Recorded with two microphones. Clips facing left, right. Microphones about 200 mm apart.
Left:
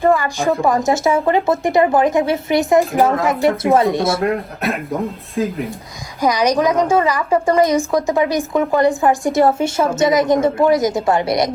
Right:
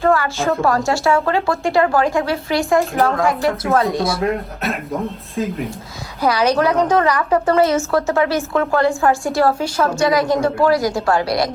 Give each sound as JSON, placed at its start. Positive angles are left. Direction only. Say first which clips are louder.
{"t": 0.0, "sound": "a woman's voice", "louder": "left 1 dB", "side_deg": 15}
{"t": 2.6, "sound": "speech", "louder": "left 2 dB", "side_deg": 0}
{"t": 6.2, "sound": "a woman's voice", "louder": "left 1 dB", "side_deg": 15}